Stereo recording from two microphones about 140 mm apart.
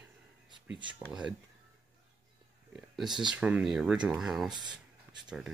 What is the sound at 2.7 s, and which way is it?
Speech, 5° right (ahead or behind).